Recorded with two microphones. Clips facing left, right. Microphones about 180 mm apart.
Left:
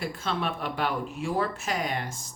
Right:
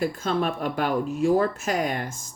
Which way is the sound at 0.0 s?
45° right (ahead or behind).